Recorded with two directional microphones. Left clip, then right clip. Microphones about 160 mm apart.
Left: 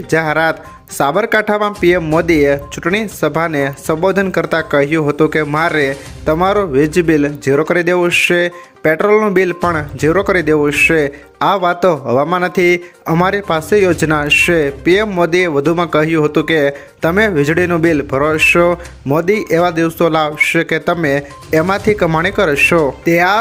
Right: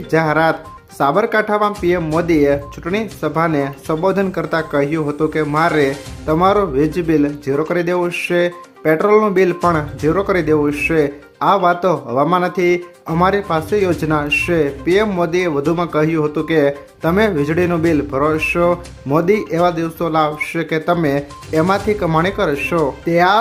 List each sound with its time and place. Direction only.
0.1 s speech: 25° left (ahead or behind)